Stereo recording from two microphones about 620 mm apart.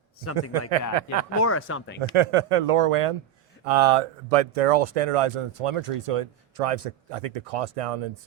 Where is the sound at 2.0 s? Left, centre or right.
Right.